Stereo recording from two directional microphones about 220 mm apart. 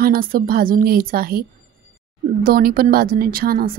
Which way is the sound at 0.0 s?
40° right (ahead or behind).